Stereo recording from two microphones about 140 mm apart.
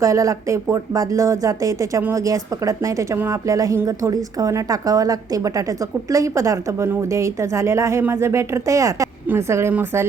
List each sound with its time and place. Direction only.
0.0 s speech: 25° right (ahead or behind)